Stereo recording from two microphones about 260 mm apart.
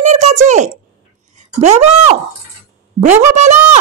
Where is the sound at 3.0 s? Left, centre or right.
Right.